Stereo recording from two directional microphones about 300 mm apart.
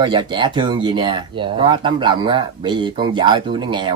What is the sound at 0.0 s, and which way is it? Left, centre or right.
Speech, centre.